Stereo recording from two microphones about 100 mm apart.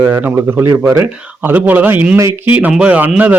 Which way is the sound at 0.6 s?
25° right (ahead or behind).